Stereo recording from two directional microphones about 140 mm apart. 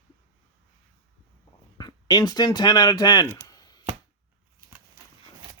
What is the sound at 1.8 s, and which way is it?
Speech, 30° left (ahead or behind).